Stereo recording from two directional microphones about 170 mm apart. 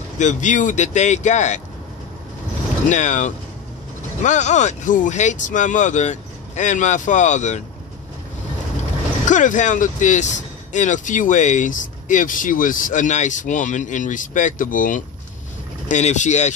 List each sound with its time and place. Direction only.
0.2 s speech: 45° left (ahead or behind)
2.9 s speech: 45° left (ahead or behind)
9.3 s speech: 45° left (ahead or behind)